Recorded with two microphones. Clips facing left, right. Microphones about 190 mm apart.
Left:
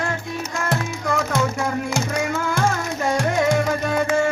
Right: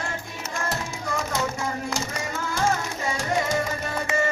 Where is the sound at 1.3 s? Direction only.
55° left (ahead or behind).